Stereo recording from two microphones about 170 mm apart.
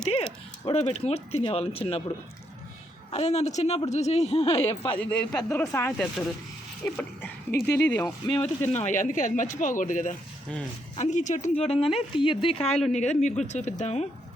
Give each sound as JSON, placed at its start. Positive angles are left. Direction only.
{"t": 0.6, "sound": "a woman's voice", "side_deg": 35}
{"t": 3.1, "sound": "a woman's voice", "side_deg": 40}
{"t": 4.8, "sound": "speech", "side_deg": 10}
{"t": 8.7, "sound": "a woman's voice", "side_deg": 45}